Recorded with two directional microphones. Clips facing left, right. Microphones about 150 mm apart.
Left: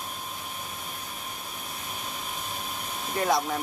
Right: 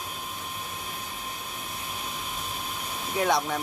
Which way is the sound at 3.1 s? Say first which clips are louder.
Even; centre (ahead or behind).